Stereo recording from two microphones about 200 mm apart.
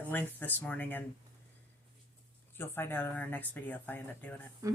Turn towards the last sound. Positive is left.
turn(degrees=-15)  # may be behind; listen again after turning